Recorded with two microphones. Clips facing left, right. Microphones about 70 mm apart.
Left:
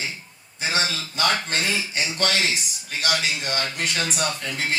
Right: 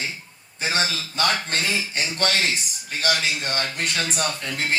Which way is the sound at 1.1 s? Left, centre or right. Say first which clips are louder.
Even; right.